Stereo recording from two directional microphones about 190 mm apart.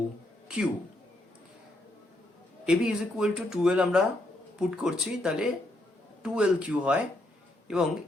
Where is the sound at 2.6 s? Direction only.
5° right (ahead or behind).